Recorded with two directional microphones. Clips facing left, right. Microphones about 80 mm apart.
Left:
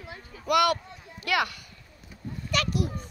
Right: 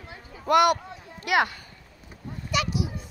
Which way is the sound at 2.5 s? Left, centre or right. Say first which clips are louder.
Right 1 dB; centre.